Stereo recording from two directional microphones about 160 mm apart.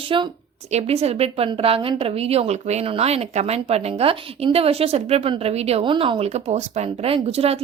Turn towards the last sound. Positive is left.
turn(degrees=-40)  # may be behind; listen again after turning